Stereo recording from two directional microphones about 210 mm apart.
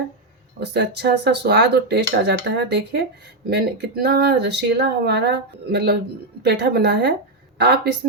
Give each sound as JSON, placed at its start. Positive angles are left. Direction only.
{"t": 0.6, "sound": "speech", "side_deg": -50}